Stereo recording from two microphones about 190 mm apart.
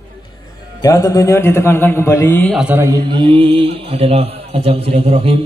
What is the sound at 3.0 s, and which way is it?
A man's voice, 25° right (ahead or behind).